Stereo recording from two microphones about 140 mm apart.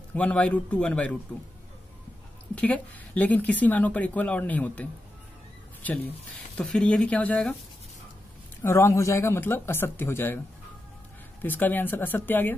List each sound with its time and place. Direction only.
0.1 s speech: 10° left (ahead or behind)
2.5 s speech: 10° left (ahead or behind)
5.8 s speech: 10° left (ahead or behind)
8.6 s speech: 20° left (ahead or behind)
11.4 s speech: 15° left (ahead or behind)